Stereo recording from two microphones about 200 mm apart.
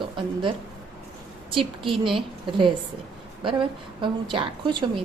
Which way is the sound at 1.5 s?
25° right (ahead or behind).